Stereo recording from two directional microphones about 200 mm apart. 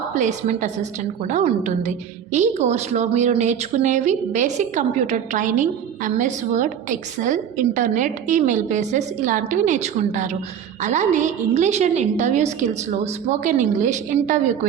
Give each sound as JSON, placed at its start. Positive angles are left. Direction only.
{"t": 0.1, "sound": "a woman's voice", "side_deg": -40}